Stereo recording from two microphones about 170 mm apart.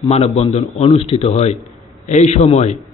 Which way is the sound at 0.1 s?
40° left (ahead or behind).